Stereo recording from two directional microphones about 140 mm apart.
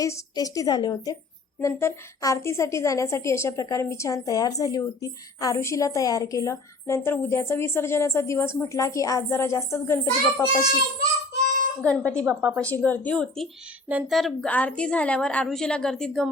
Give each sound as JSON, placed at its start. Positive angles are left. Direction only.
{"t": 0.0, "sound": "a woman's voice", "side_deg": 25}
{"t": 11.8, "sound": "speech", "side_deg": 10}
{"t": 12.2, "sound": "a woman's voice", "side_deg": -20}
{"t": 12.5, "sound": "a woman's voice", "side_deg": 10}